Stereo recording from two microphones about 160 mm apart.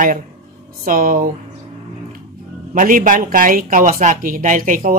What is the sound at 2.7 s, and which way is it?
Speech, 55° right (ahead or behind).